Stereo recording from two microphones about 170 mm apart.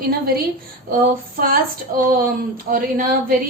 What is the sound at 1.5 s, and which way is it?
A woman's voice, 55° right (ahead or behind).